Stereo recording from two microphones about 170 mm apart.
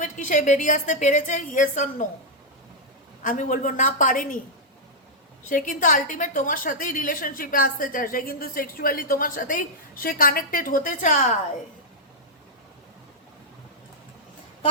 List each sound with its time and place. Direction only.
0.0 s a woman's voice: 50° left (ahead or behind)
3.2 s a woman's voice: 55° left (ahead or behind)
5.5 s a woman's voice: 50° left (ahead or behind)